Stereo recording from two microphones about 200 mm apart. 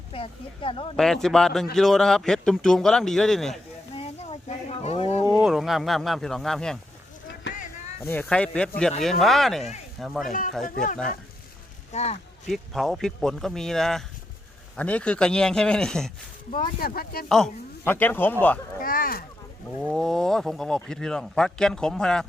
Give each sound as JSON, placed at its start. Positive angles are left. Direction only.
{"t": 0.1, "sound": "speech", "side_deg": 25}
{"t": 0.9, "sound": "speech", "side_deg": 0}
{"t": 3.9, "sound": "a sound", "side_deg": 30}
{"t": 5.3, "sound": "speech", "side_deg": 0}
{"t": 7.5, "sound": "a sound", "side_deg": 65}
{"t": 8.0, "sound": "speech", "side_deg": 10}
{"t": 10.6, "sound": "speech", "side_deg": 40}
{"t": 12.5, "sound": "speech", "side_deg": 0}
{"t": 16.5, "sound": "speech", "side_deg": 45}
{"t": 17.2, "sound": "speech", "side_deg": 0}
{"t": 18.8, "sound": "speech", "side_deg": 45}
{"t": 19.8, "sound": "speech", "side_deg": 0}